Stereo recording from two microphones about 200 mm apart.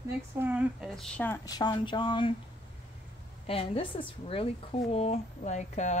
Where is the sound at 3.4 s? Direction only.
30° left (ahead or behind).